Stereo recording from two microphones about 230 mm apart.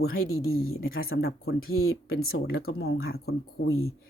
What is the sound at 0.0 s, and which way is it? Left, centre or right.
Speech, left.